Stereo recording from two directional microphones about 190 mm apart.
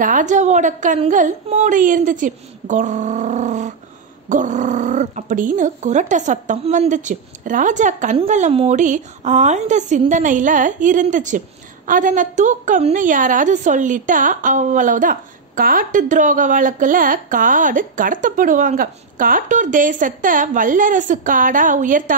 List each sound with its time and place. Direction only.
0.0 s a woman's voice: 40° right (ahead or behind)